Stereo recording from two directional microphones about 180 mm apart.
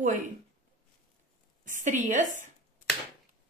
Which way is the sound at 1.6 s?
45° right (ahead or behind).